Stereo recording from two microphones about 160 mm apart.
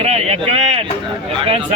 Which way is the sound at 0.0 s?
40° right (ahead or behind).